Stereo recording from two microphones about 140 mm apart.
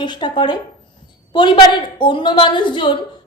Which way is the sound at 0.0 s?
35° left (ahead or behind).